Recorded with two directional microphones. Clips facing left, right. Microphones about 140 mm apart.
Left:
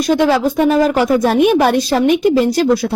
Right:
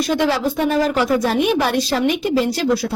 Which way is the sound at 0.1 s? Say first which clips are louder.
Left 8 dB; 50° left (ahead or behind).